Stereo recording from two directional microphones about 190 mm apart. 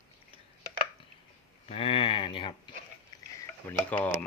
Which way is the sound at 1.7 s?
30° left (ahead or behind).